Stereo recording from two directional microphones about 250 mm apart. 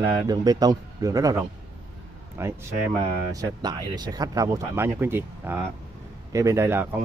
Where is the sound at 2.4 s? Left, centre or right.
Centre.